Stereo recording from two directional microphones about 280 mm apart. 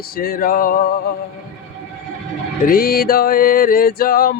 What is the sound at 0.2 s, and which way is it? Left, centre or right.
Music, left.